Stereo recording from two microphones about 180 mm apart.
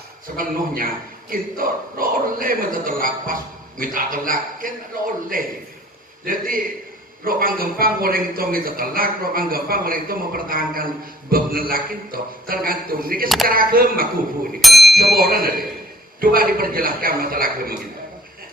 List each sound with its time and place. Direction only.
0.3 s speech: 50° right (ahead or behind)
13.2 s speech: centre (ahead or behind)
13.5 s speech: 55° right (ahead or behind)
14.6 s a sound: centre (ahead or behind)
14.9 s speech: 55° right (ahead or behind)